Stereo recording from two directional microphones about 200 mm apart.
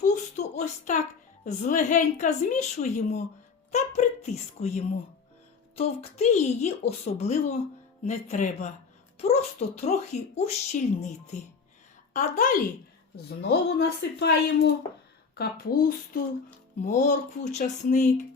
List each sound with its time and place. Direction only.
0.0 s a sound: 35° left (ahead or behind)
1.5 s speech: 40° left (ahead or behind)
13.4 s a woman's voice: 55° left (ahead or behind)
16.8 s speech: 35° left (ahead or behind)